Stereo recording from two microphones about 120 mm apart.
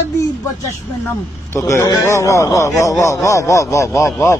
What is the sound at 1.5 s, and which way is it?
A man's voice, 25° left (ahead or behind).